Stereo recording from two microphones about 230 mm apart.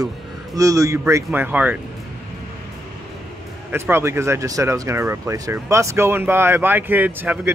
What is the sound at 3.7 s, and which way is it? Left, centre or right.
Speech, centre.